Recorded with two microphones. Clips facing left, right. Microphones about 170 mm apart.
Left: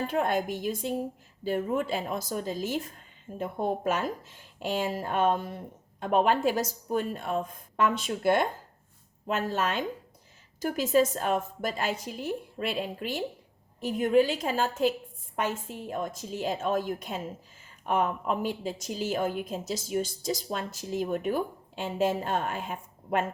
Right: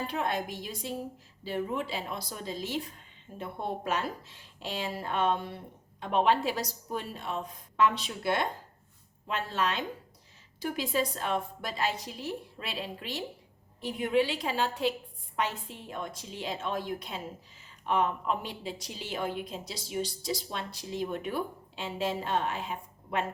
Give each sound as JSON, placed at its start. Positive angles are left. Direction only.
{"t": 0.1, "sound": "a woman's voice", "side_deg": 50}